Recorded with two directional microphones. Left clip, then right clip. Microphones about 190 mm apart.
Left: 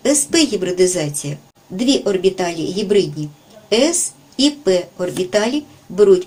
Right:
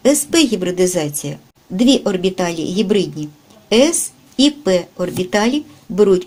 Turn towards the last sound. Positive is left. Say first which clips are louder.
# left 1 dB
turn(degrees=-45)  # may be behind; listen again after turning